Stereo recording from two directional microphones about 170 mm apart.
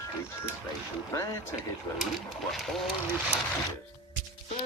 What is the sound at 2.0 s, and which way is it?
Speech, centre (ahead or behind).